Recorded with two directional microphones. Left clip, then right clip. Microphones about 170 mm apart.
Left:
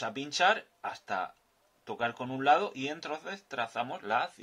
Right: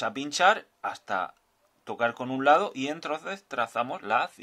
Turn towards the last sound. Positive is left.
turn(degrees=-35)  # may be behind; listen again after turning